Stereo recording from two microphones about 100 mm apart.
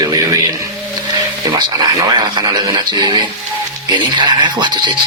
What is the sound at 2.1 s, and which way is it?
Speech, 45° right (ahead or behind).